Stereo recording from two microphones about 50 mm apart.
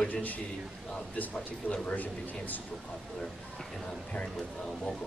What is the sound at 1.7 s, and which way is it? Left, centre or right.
Speech, left.